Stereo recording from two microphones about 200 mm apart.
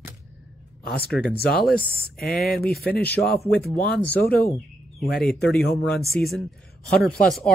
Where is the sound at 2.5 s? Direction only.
50° left (ahead or behind).